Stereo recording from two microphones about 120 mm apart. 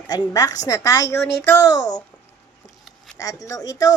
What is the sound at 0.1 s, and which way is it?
Speech, 30° left (ahead or behind).